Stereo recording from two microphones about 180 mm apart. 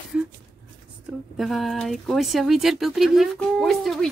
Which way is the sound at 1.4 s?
Centre (ahead or behind).